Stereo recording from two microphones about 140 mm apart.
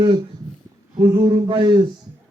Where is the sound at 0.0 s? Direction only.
35° right (ahead or behind).